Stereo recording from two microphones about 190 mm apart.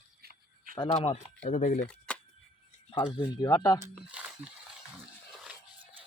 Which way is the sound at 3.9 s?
5° right (ahead or behind).